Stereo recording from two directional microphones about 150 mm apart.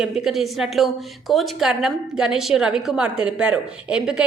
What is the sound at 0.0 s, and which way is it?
A woman's voice, centre (ahead or behind).